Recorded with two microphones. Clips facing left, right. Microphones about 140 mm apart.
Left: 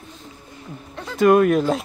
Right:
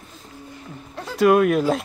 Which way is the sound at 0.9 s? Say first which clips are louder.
Left 1 dB; centre (ahead or behind).